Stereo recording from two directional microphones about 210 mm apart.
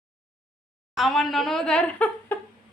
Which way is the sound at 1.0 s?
Centre (ahead or behind).